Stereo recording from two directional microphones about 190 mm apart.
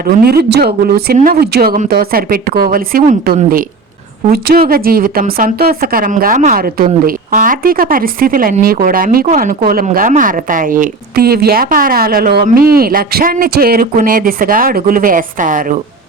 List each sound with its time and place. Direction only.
0.1 s a woman's voice: 50° right (ahead or behind)